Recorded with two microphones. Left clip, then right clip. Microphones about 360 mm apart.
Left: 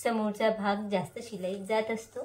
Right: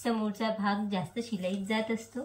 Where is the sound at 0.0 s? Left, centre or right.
Left.